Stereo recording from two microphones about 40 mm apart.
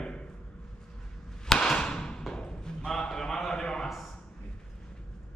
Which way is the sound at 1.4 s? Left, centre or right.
Centre.